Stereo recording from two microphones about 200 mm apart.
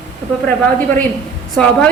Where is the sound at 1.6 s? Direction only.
5° left (ahead or behind).